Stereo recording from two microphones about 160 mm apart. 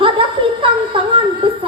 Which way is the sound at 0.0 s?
30° right (ahead or behind).